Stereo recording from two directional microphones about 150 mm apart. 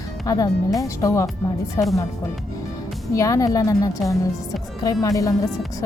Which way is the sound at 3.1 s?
20° left (ahead or behind).